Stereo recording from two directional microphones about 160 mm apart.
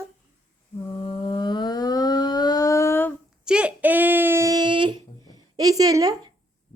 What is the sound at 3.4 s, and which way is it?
Child singing, 5° right (ahead or behind).